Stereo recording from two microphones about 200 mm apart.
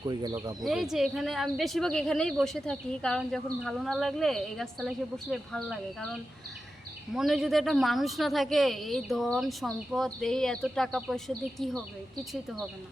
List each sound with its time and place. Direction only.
0.0 s speech: 20° right (ahead or behind)
0.6 s a woman's voice: centre (ahead or behind)
7.1 s a woman's voice: centre (ahead or behind)